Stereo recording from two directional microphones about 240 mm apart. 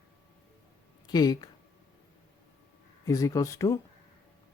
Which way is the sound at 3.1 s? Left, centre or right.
Centre.